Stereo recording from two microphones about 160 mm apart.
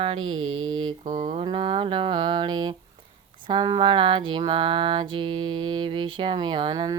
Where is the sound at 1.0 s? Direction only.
50° right (ahead or behind).